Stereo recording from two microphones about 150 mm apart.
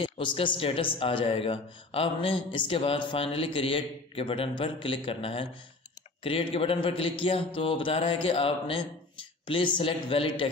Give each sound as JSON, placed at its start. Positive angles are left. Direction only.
{"t": 0.0, "sound": "speech", "side_deg": 35}